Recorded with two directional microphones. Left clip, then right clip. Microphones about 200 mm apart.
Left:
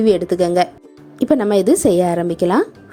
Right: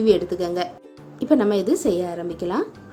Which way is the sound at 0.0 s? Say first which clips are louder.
Left 4 dB; 40° left (ahead or behind).